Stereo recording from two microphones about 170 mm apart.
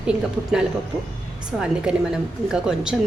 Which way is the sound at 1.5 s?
Centre (ahead or behind).